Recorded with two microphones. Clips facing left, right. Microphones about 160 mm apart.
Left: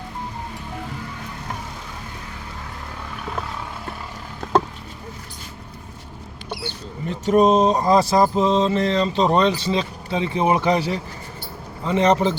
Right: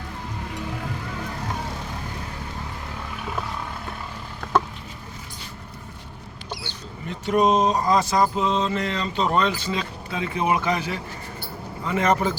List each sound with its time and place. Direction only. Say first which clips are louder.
7.1 s mantra: left 4 dB; 35° left (ahead or behind)
11.9 s a man's voice: left 4 dB; 25° left (ahead or behind)